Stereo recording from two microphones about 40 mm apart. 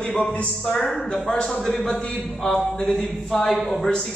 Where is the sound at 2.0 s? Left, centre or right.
Left.